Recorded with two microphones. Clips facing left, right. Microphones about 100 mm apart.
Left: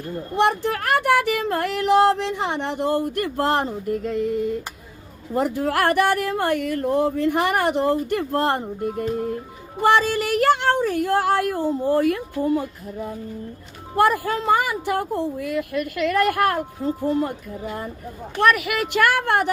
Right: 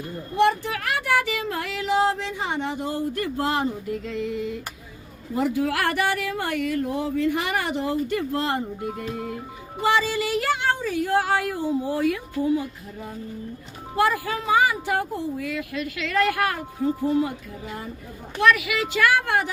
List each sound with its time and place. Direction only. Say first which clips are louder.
0.0 s speech: even; 60° left (ahead or behind)
13.9 s speech: left 4 dB; 55° left (ahead or behind)